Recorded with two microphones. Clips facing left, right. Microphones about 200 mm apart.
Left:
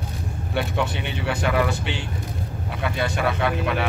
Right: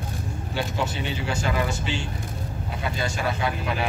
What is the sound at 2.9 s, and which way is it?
Speech, 60° left (ahead or behind).